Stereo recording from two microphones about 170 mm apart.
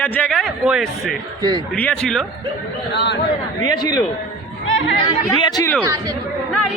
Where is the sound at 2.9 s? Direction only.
90° left.